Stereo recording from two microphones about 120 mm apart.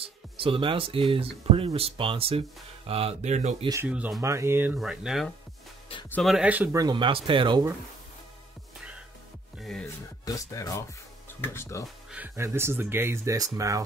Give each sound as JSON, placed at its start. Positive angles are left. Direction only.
{"t": 0.0, "sound": "speech", "side_deg": -50}
{"t": 3.8, "sound": "speech", "side_deg": -15}
{"t": 4.2, "sound": "speech", "side_deg": -25}
{"t": 4.7, "sound": "speech", "side_deg": -5}
{"t": 6.7, "sound": "speech", "side_deg": -30}
{"t": 7.0, "sound": "speech", "side_deg": -45}
{"t": 9.6, "sound": "music", "side_deg": 0}
{"t": 10.2, "sound": "speech", "side_deg": 30}
{"t": 12.4, "sound": "speech", "side_deg": -20}